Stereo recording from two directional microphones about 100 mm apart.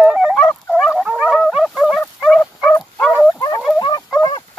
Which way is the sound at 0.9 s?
5° right (ahead or behind).